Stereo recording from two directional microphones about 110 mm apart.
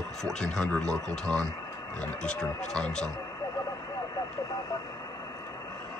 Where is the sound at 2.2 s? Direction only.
5° left (ahead or behind).